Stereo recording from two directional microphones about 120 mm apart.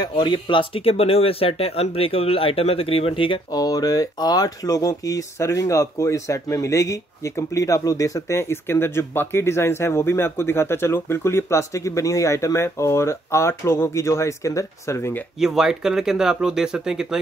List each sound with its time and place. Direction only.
0.0 s speech: 35° left (ahead or behind)
3.5 s speech: 30° left (ahead or behind)
15.4 s speech: 5° right (ahead or behind)